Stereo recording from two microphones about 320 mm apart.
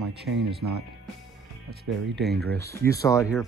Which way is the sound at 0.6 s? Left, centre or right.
Right.